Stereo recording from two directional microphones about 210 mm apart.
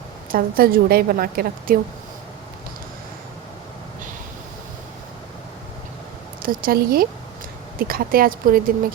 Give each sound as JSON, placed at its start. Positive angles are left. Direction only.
{"t": 0.3, "sound": "a woman's voice", "side_deg": -45}
{"t": 6.4, "sound": "a woman's voice", "side_deg": -40}